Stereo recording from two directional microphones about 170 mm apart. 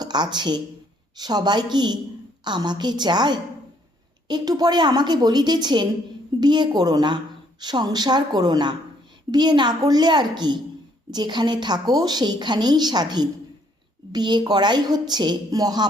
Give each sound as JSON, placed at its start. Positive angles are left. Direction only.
{"t": 0.0, "sound": "a woman's voice", "side_deg": -25}